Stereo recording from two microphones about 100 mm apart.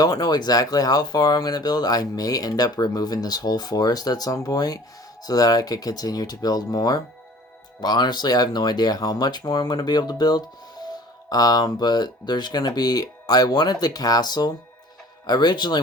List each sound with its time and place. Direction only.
0.0 s speech: 40° left (ahead or behind)